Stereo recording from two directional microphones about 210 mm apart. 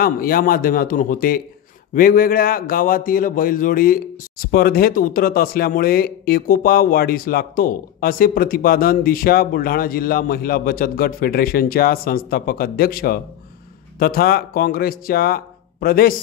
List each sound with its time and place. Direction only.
0.0 s a man's voice: 45° left (ahead or behind)